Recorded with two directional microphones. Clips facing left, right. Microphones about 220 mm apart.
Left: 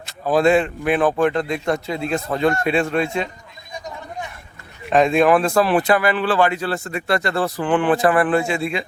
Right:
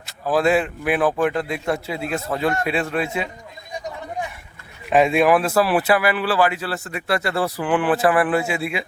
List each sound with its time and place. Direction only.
0.0 s a man's voice: 5° right (ahead or behind)
4.9 s speech: 10° right (ahead or behind)